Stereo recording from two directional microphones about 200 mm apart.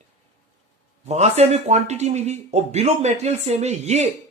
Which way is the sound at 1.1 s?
35° right (ahead or behind).